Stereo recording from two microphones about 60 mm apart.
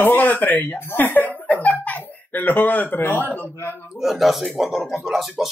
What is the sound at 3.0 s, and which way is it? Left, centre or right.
Speech, left.